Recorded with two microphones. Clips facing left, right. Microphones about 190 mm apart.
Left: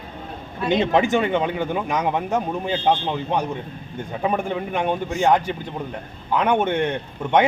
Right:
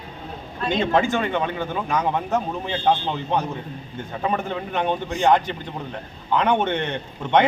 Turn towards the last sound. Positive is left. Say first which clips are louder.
# even
turn(degrees=10)  # may be behind; listen again after turning